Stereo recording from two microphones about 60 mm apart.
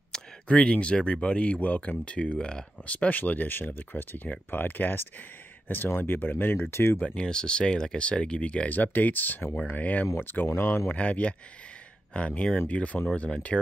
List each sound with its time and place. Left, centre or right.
0.1 s speech: centre
2.9 s speech: left
7.2 s speech: centre
10.1 s speech: left
10.9 s speech: left